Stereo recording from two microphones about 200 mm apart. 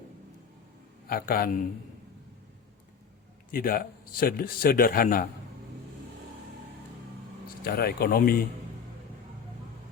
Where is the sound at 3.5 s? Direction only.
45° left (ahead or behind).